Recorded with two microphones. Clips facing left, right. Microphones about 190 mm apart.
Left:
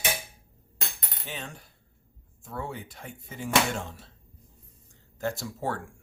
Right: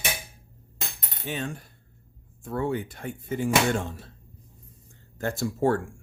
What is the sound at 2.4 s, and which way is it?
Speech, 55° right (ahead or behind).